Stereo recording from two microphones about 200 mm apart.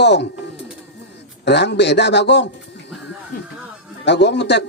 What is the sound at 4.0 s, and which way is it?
Speech, 60° left (ahead or behind).